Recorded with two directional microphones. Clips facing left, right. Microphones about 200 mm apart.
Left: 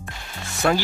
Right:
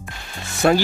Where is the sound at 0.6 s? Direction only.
25° right (ahead or behind).